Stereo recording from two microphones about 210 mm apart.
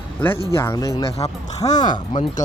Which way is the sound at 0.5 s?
15° left (ahead or behind).